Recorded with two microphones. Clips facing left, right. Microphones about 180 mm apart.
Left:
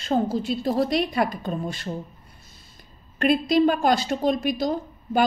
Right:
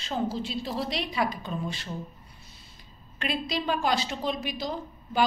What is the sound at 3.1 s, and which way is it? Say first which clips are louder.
A woman's voice: left 11 dB; 50° left (ahead or behind).